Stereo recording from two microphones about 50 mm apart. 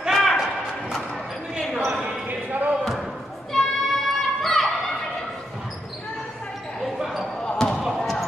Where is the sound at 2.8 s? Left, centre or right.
Centre.